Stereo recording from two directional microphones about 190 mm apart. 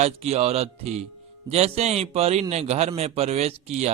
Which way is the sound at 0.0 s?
35° right (ahead or behind).